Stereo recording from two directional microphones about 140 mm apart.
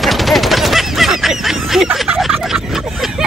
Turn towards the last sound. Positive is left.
turn(degrees=-5)  # may be behind; listen again after turning